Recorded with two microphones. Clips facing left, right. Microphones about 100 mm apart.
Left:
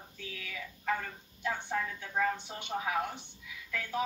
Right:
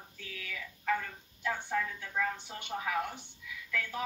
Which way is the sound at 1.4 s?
20° left (ahead or behind).